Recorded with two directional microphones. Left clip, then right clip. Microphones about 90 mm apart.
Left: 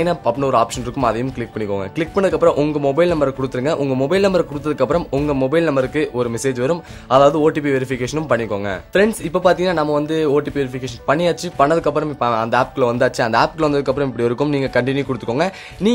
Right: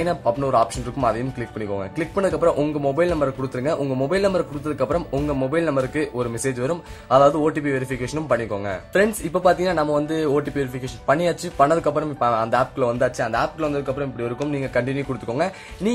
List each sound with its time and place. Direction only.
0.0 s speech: 30° left (ahead or behind)
8.9 s speech: 20° left (ahead or behind)
13.2 s speech: 55° left (ahead or behind)
13.8 s a man's voice: 90° left
14.6 s speech: 45° left (ahead or behind)
15.2 s speech: 35° left (ahead or behind)